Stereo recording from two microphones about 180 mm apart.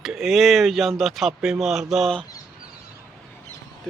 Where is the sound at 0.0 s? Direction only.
Centre (ahead or behind).